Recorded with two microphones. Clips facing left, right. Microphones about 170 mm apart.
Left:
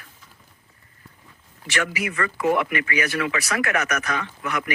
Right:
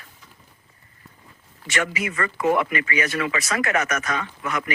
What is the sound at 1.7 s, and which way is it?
Speech, 65° left (ahead or behind).